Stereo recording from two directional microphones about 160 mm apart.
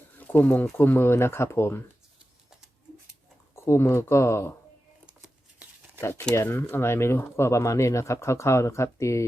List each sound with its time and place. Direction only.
0.2 s speech: 10° left (ahead or behind)
3.5 s speech: 15° left (ahead or behind)
6.0 s speech: 15° left (ahead or behind)